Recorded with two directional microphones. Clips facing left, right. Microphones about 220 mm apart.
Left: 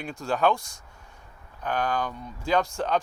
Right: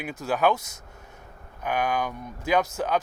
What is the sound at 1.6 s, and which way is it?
Speech, 10° right (ahead or behind).